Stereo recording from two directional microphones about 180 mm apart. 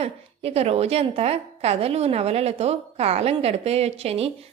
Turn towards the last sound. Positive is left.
turn(degrees=-35)  # may be behind; listen again after turning